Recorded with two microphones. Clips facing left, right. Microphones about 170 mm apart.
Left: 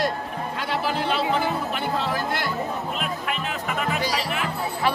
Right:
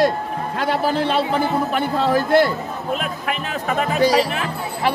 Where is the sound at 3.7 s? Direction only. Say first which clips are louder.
Right 9 dB; 35° right (ahead or behind).